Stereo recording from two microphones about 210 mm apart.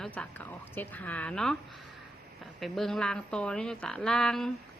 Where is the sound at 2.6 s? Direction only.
Centre (ahead or behind).